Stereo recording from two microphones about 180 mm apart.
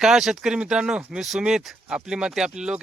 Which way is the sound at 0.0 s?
Centre (ahead or behind).